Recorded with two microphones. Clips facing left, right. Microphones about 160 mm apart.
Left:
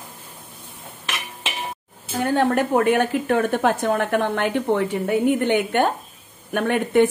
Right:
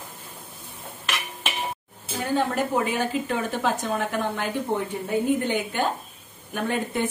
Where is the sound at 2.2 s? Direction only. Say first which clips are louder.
Left 5 dB; 65° left (ahead or behind).